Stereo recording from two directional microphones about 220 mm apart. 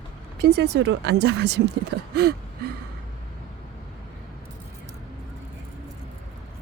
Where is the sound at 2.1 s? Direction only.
45° right (ahead or behind).